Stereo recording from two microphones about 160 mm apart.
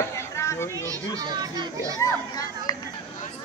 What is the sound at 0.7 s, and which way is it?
A child's voice, 20° right (ahead or behind).